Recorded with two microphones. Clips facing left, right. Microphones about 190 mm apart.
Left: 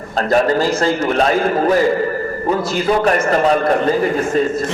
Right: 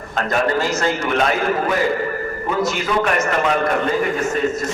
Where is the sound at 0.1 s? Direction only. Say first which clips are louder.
Left 5 dB; 35° left (ahead or behind).